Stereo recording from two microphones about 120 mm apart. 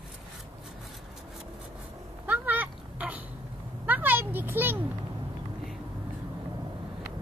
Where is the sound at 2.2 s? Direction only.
15° right (ahead or behind).